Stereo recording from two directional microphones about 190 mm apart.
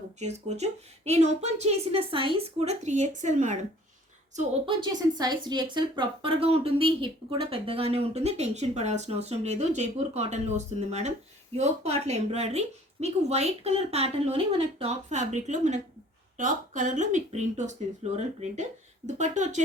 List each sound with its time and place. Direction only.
0.2 s speech: 35° right (ahead or behind)
4.6 s a woman's voice: 25° right (ahead or behind)